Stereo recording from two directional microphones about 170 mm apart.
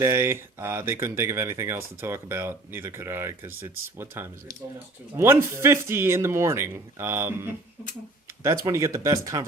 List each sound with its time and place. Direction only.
0.0 s speech: 15° right (ahead or behind)
8.6 s speech: 20° right (ahead or behind)